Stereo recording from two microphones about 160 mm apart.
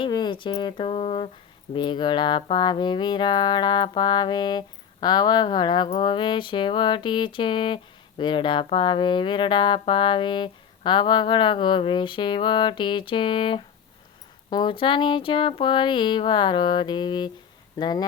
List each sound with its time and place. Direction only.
0.0 s speech: 30° left (ahead or behind)